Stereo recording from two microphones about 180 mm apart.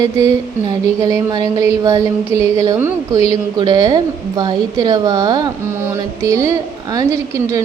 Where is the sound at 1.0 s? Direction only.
20° right (ahead or behind).